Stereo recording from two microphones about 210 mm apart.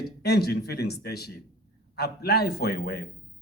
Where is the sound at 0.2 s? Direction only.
50° left (ahead or behind).